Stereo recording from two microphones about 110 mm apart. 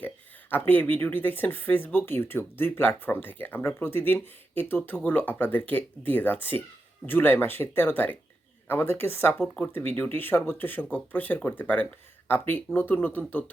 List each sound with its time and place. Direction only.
0.7 s speech: 15° left (ahead or behind)